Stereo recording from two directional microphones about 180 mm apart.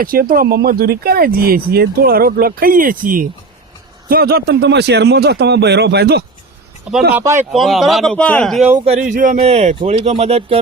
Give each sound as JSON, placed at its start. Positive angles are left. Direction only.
{"t": 0.0, "sound": "a man's voice", "side_deg": -55}
{"t": 7.1, "sound": "speech", "side_deg": -10}
{"t": 7.5, "sound": "speech", "side_deg": 0}
{"t": 8.8, "sound": "speech", "side_deg": -40}